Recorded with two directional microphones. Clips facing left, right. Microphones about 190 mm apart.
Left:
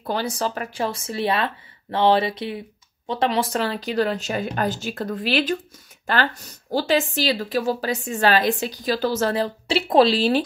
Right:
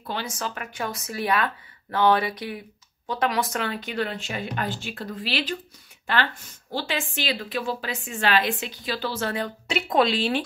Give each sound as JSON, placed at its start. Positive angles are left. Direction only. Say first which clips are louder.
{"t": 0.0, "sound": "speech", "louder": "left 6 dB", "side_deg": 40}